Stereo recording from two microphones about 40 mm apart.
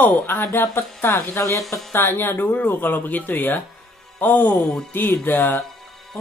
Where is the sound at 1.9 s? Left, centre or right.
Left.